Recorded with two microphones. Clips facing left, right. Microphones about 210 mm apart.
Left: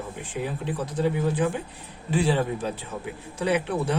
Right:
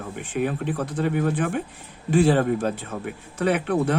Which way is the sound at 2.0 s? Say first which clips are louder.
Right 5 dB; 50° right (ahead or behind).